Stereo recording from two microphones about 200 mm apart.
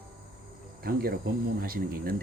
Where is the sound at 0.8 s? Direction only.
50° right (ahead or behind).